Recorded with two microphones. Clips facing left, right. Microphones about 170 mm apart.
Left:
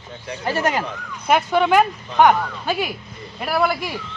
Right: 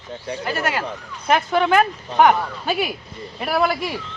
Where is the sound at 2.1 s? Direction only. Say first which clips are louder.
Even; 5° right (ahead or behind).